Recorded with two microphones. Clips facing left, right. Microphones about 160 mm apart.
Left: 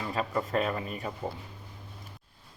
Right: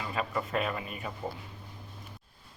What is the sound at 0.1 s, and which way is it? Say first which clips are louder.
Speech: left 2 dB; 35° left (ahead or behind).